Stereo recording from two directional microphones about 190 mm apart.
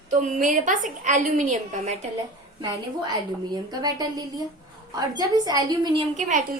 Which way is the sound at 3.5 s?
20° right (ahead or behind).